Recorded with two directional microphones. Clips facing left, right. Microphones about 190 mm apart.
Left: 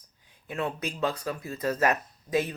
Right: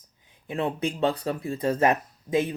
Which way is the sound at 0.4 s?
25° right (ahead or behind).